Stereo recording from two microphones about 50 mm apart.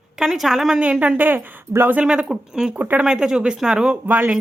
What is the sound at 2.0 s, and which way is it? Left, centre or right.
Speech, centre.